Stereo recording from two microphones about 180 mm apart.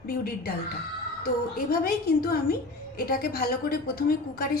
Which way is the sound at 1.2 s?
55° left (ahead or behind).